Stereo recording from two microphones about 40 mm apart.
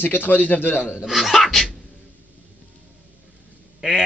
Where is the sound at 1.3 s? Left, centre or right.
Centre.